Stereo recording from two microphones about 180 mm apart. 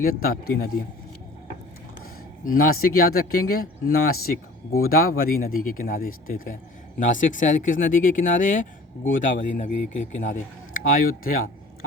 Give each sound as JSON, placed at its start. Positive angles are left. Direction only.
{"t": 0.0, "sound": "speech", "side_deg": 55}
{"t": 2.4, "sound": "a man's voice", "side_deg": 50}